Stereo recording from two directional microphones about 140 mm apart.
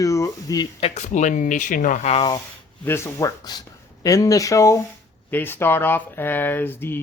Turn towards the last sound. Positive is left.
turn(degrees=15)  # may be behind; listen again after turning